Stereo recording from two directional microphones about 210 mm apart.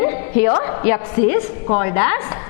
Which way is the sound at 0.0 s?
15° left (ahead or behind).